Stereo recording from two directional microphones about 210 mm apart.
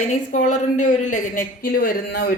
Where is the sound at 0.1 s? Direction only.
35° left (ahead or behind).